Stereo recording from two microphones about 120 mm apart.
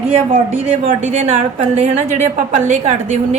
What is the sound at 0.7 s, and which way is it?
A woman's voice, 65° right (ahead or behind).